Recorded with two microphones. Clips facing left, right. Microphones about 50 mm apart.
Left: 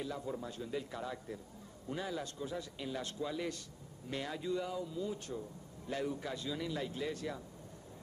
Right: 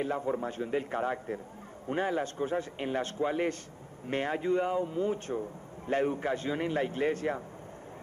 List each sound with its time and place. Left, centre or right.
0.0 s a man's voice: right